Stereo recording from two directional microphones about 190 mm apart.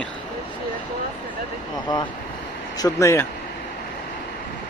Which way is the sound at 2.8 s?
15° left (ahead or behind).